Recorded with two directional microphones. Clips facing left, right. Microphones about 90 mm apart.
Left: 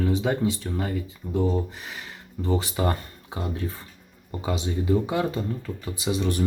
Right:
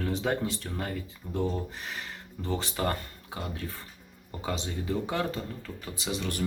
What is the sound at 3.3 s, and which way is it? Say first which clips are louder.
Speech: left 6 dB; 30° left (ahead or behind).